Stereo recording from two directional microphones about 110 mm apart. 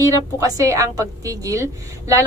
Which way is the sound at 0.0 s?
30° right (ahead or behind).